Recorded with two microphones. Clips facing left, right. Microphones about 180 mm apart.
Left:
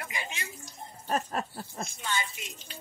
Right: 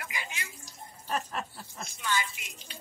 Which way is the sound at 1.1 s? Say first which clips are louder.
Left 3 dB; 40° left (ahead or behind).